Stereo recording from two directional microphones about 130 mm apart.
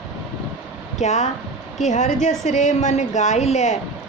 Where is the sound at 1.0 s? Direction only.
60° left (ahead or behind).